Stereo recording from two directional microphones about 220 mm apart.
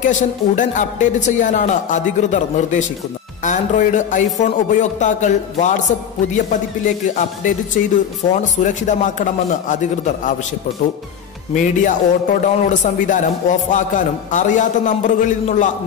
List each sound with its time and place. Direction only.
0.0 s a man's voice: 35° left (ahead or behind)
7.2 s a man's voice: 35° left (ahead or behind)
11.5 s a man's voice: 35° left (ahead or behind)